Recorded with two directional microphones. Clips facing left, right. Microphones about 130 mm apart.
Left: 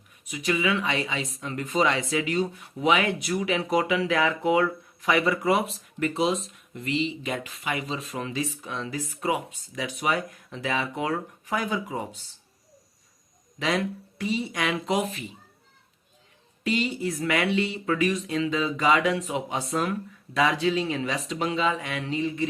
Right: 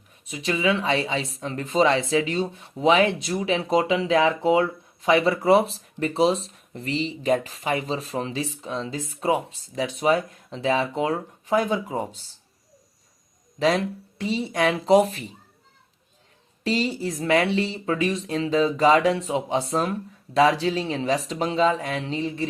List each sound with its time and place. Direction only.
0.3 s speech: 30° right (ahead or behind)
13.6 s speech: 30° right (ahead or behind)
16.6 s speech: 30° right (ahead or behind)